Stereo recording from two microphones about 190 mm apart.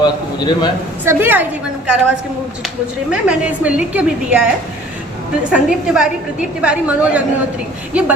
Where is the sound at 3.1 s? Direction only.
5° right (ahead or behind).